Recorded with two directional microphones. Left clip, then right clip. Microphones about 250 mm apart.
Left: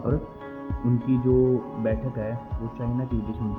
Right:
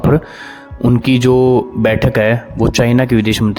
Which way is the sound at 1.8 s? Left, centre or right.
Right.